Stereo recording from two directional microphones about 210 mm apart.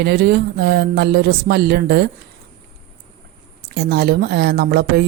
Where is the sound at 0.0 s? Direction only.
50° right (ahead or behind).